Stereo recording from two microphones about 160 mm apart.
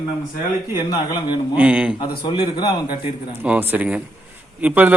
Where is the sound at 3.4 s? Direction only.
10° right (ahead or behind).